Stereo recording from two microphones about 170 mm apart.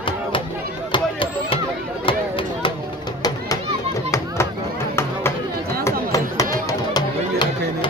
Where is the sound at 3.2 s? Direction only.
25° left (ahead or behind).